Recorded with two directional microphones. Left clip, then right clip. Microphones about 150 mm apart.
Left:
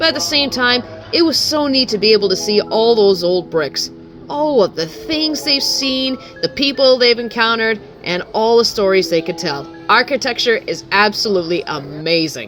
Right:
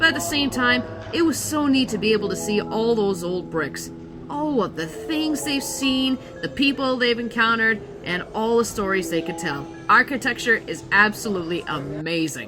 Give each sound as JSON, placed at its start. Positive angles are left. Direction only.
{"t": 0.0, "sound": "music", "side_deg": 20}